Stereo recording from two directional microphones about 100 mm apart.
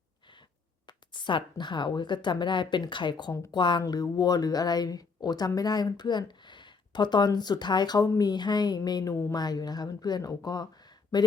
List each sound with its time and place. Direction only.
0.9 s speech: 50° left (ahead or behind)